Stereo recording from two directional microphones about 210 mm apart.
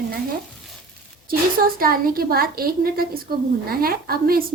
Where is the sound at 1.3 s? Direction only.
45° right (ahead or behind).